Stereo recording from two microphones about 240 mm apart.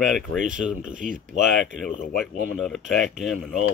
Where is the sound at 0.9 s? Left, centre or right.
Right.